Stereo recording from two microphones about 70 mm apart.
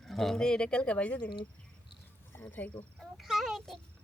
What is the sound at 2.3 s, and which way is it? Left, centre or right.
Speech, left.